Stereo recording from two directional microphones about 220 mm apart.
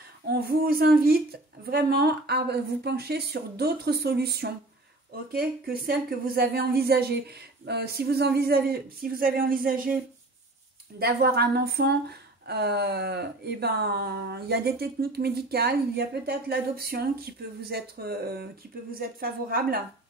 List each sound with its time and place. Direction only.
0.3 s speech: 45° right (ahead or behind)
11.0 s speech: 45° right (ahead or behind)